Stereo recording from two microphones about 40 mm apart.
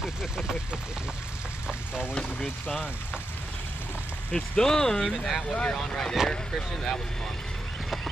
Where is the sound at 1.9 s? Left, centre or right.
Right.